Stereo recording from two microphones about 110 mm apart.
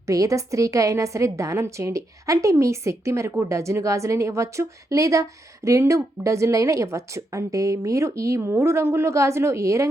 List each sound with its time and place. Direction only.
0.1 s a woman's voice: 30° right (ahead or behind)